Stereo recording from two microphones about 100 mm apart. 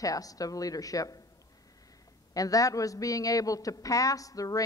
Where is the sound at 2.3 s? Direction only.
35° left (ahead or behind).